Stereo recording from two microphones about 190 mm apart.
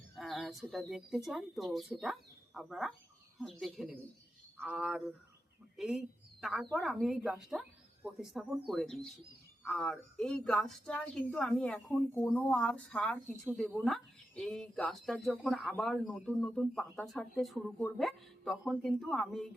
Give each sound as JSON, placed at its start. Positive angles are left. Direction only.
{"t": 0.2, "sound": "a woman's voice", "side_deg": 0}